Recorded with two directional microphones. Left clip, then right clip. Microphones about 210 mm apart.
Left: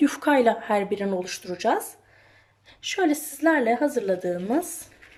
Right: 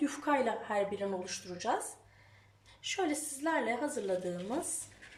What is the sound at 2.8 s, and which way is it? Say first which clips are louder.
Speech: left 10 dB; 50° left (ahead or behind).